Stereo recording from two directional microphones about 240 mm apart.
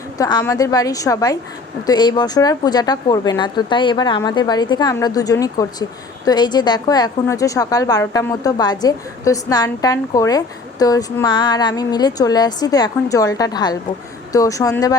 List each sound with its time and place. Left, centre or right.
0.2 s a woman's voice: centre